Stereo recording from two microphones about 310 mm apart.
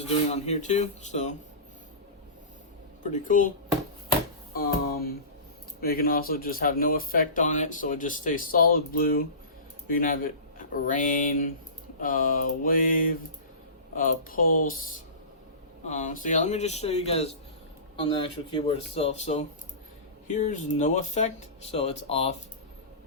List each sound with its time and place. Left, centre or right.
0.0 s speech: left
3.0 s speech: left
4.5 s music: left
5.8 s a man's voice: left
15.9 s speech: left